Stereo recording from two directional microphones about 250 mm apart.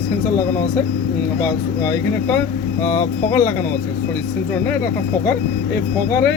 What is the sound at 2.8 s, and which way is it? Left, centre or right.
Speech, centre.